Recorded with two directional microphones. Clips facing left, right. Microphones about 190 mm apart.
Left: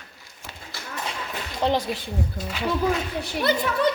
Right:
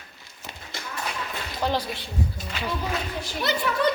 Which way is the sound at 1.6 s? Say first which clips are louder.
Left 3 dB; 20° left (ahead or behind).